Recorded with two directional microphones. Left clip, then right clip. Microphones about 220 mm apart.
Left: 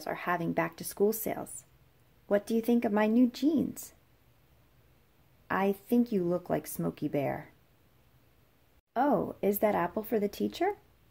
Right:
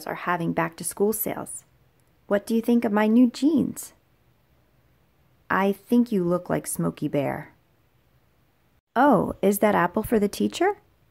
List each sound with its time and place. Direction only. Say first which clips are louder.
0.0 s speech: right 5 dB; 15° right (ahead or behind)
5.5 s speech: right 6 dB; 15° right (ahead or behind)
8.9 s speech: right 9 dB; 25° right (ahead or behind)